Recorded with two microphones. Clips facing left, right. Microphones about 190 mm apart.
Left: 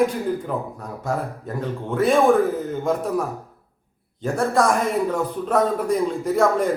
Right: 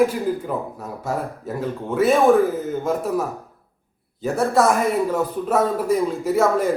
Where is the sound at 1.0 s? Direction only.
5° right (ahead or behind).